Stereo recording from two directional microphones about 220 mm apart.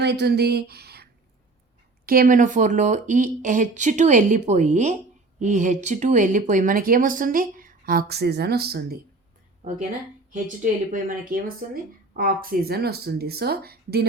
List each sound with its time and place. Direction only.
0.0 s speech: 50° right (ahead or behind)
2.0 s speech: 40° right (ahead or behind)
10.6 s speech: 40° right (ahead or behind)